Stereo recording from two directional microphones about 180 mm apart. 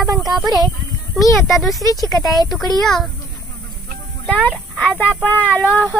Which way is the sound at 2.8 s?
Centre (ahead or behind).